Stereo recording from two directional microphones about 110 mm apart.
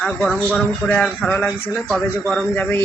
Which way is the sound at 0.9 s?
10° left (ahead or behind).